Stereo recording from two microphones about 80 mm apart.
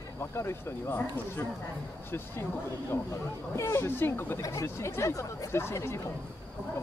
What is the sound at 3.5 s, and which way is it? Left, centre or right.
Speech, left.